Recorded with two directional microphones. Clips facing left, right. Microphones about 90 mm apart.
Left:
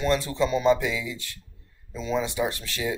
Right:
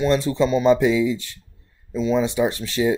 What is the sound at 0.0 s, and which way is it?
Speech, 25° right (ahead or behind).